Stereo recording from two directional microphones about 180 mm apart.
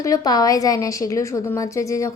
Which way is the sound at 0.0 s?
20° left (ahead or behind).